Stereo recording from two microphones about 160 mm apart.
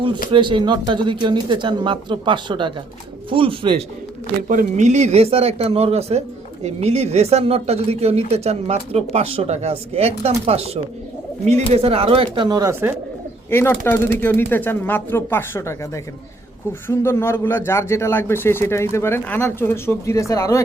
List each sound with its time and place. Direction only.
0.3 s speech: 30° right (ahead or behind)
4.4 s speech: 50° right (ahead or behind)
11.7 s speech: 35° right (ahead or behind)
13.5 s speech: 15° left (ahead or behind)